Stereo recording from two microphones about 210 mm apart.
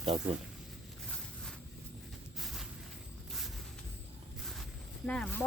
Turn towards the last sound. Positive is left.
turn(degrees=5)  # may be behind; listen again after turning